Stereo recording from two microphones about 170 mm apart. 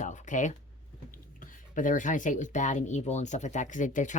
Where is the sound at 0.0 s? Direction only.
45° left (ahead or behind).